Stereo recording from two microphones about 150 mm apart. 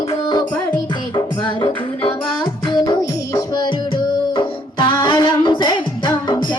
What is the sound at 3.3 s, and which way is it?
Music, 25° left (ahead or behind).